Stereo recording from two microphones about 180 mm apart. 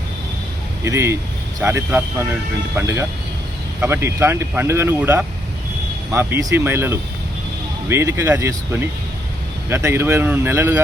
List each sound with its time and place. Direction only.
0.9 s speech: 15° right (ahead or behind)